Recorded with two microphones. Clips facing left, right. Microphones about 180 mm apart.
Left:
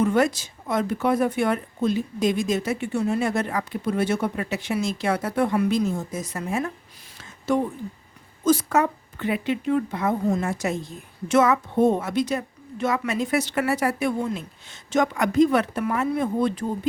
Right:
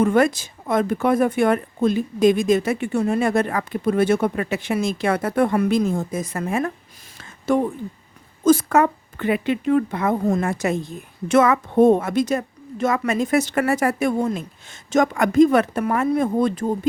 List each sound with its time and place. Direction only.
0.0 s speech: 55° right (ahead or behind)
7.2 s a sound: 50° right (ahead or behind)
8.4 s a woman's voice: 50° right (ahead or behind)